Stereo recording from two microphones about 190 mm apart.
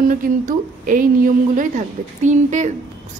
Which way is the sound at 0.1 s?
45° right (ahead or behind).